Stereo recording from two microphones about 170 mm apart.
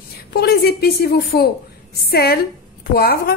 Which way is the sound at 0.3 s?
70° left (ahead or behind).